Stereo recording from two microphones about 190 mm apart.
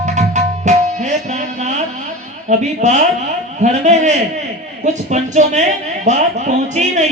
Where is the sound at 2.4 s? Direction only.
40° right (ahead or behind).